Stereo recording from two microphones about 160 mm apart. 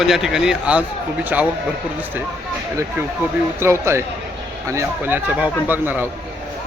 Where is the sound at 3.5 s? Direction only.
15° right (ahead or behind).